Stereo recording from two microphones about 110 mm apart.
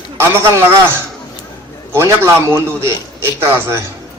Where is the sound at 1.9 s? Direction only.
25° right (ahead or behind).